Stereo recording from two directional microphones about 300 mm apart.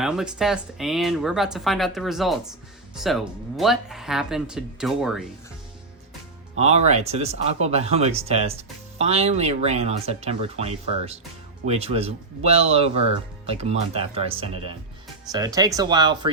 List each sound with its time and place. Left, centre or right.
0.0 s speech: centre
6.6 s speech: right